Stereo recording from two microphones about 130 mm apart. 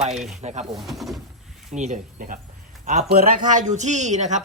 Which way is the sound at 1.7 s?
70° right (ahead or behind).